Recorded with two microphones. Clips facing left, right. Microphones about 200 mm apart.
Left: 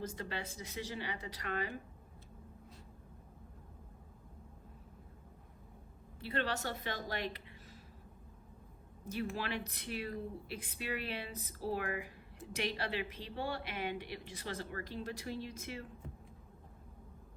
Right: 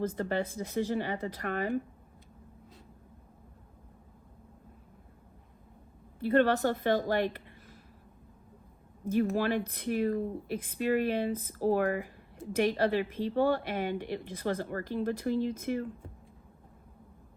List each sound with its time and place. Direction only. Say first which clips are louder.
0.0 s a woman's voice: right 11 dB; 55° right (ahead or behind)
6.1 s speech: right 12 dB; 50° right (ahead or behind)
9.0 s a woman's voice: right 11 dB; 50° right (ahead or behind)